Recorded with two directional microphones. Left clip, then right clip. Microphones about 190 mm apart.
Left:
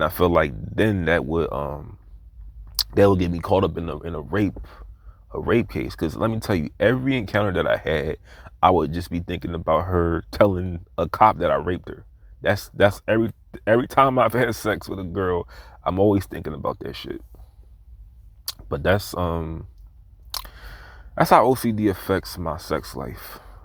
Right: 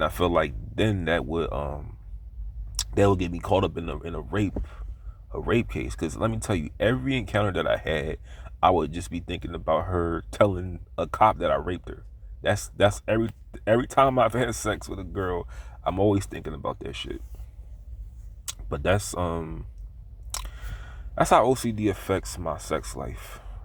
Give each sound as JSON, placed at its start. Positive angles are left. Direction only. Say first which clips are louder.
{"t": 0.0, "sound": "speech", "louder": "left 4 dB", "side_deg": 35}
{"t": 18.4, "sound": "speech", "louder": "left 4 dB", "side_deg": 35}